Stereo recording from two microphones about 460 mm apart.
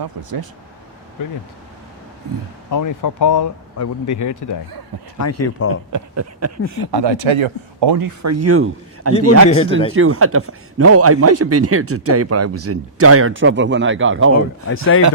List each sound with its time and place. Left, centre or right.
0.0 s speech: right
2.6 s speech: left
5.9 s a man's voice: right
6.8 s speech: right
7.9 s a man's voice: right
9.5 s speech: centre
9.9 s a man's voice: right
14.7 s speech: left